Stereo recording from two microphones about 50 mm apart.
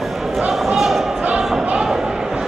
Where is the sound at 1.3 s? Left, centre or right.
Right.